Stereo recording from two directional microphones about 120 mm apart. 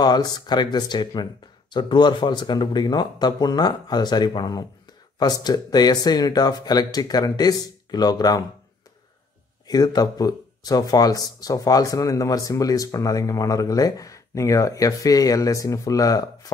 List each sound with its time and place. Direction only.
0.0 s speech: 35° left (ahead or behind)
9.7 s speech: 30° left (ahead or behind)